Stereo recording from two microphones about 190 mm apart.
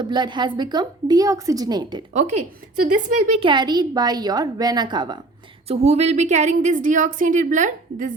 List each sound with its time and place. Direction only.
0.0 s a woman's voice: 25° right (ahead or behind)
2.8 s a woman's voice: 35° right (ahead or behind)
3.5 s a woman's voice: 20° right (ahead or behind)
5.6 s a woman's voice: 35° right (ahead or behind)